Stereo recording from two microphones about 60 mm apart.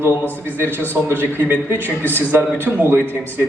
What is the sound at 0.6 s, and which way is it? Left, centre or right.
A man's voice, right.